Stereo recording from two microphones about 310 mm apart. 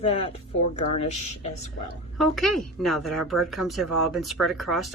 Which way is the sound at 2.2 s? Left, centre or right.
Centre.